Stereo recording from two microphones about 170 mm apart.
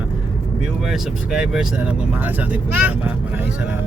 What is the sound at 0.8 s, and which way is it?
Speech, centre (ahead or behind).